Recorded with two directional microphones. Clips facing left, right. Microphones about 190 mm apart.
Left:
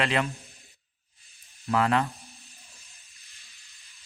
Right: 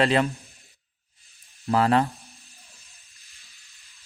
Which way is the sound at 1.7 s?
35° right (ahead or behind).